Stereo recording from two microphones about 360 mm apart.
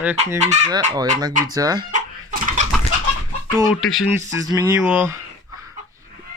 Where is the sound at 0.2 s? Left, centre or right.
Centre.